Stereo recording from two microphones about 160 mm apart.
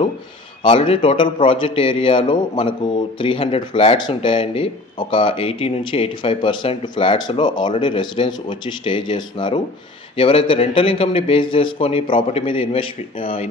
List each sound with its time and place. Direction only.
0.7 s a man's voice: 35° left (ahead or behind)